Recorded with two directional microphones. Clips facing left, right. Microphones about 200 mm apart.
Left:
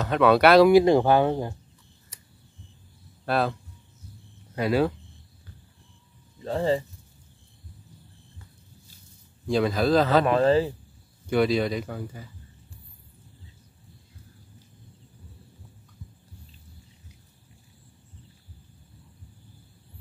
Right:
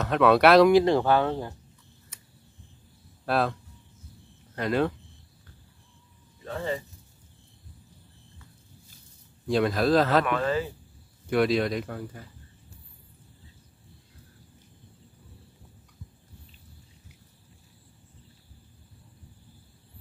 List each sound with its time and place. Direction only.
0.0 s speech: centre (ahead or behind)
3.3 s speech: centre (ahead or behind)
4.6 s speech: 5° left (ahead or behind)
6.4 s speech: 30° left (ahead or behind)
9.5 s speech: centre (ahead or behind)
10.2 s speech: 30° left (ahead or behind)
11.2 s speech: centre (ahead or behind)